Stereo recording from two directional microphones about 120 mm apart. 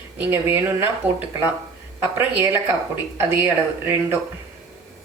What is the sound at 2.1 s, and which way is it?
Speech, 15° right (ahead or behind).